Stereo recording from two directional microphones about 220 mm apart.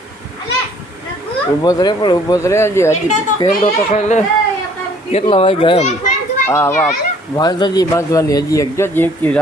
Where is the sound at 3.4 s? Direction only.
30° left (ahead or behind).